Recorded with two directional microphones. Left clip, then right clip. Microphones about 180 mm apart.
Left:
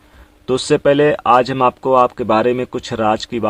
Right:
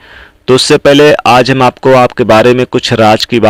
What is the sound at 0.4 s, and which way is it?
Speech, 25° right (ahead or behind).